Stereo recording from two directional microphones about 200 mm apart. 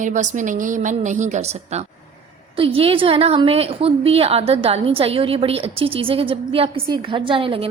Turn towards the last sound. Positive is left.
turn(degrees=-25)  # may be behind; listen again after turning